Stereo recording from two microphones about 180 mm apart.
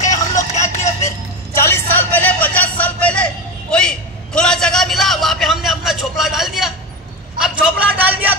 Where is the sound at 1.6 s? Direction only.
10° left (ahead or behind).